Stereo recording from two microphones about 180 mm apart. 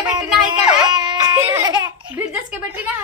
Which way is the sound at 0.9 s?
25° right (ahead or behind).